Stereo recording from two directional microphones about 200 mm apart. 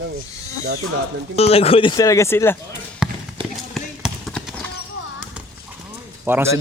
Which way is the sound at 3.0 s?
5° right (ahead or behind).